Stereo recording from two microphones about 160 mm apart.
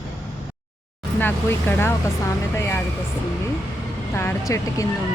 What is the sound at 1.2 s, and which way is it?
Speech, 15° left (ahead or behind).